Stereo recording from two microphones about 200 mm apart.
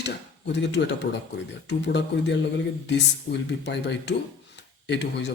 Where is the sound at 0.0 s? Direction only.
60° left (ahead or behind).